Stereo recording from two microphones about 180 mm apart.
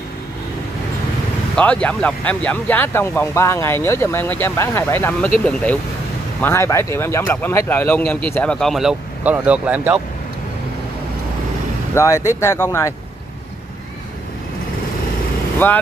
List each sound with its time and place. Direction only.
1.6 s speech: 5° left (ahead or behind)
11.9 s speech: 15° left (ahead or behind)
15.6 s speech: 10° left (ahead or behind)